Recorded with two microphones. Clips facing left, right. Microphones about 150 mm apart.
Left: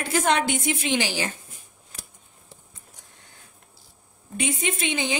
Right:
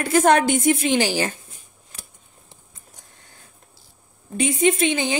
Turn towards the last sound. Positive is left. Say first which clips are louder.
# right 6 dB
turn(degrees=-40)  # may be behind; listen again after turning